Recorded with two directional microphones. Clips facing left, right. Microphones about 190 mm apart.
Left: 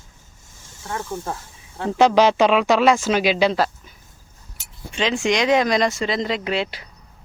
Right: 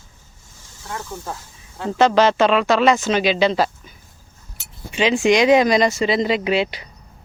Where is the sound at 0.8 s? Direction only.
25° left (ahead or behind).